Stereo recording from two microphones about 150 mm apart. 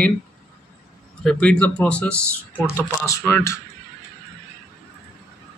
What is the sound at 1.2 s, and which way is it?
Speech, 5° left (ahead or behind).